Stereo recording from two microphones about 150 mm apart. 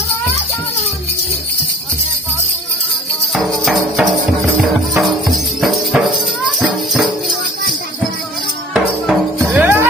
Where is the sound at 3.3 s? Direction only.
Centre (ahead or behind).